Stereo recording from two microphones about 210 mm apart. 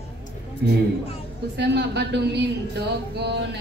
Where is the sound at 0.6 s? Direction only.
50° right (ahead or behind).